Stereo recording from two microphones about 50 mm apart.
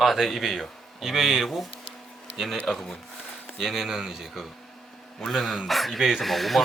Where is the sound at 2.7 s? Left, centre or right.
Centre.